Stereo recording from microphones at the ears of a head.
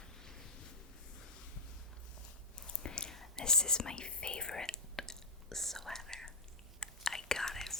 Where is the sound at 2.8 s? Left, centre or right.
Left.